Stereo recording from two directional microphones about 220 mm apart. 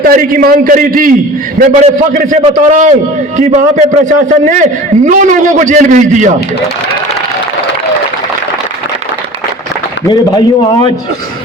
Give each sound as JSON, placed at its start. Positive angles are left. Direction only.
{"t": 0.0, "sound": "a man's voice", "side_deg": -40}